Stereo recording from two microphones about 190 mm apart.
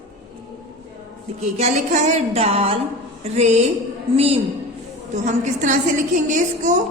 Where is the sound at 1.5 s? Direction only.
35° right (ahead or behind).